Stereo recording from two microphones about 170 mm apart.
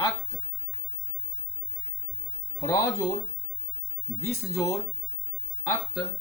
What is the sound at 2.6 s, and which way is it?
Speech, 15° left (ahead or behind).